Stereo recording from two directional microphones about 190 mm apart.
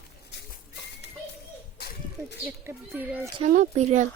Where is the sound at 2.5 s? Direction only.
15° right (ahead or behind).